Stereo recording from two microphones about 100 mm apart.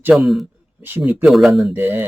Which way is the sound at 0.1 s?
Centre (ahead or behind).